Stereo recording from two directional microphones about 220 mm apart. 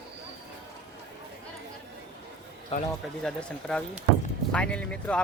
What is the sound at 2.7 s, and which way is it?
Speech, 30° left (ahead or behind).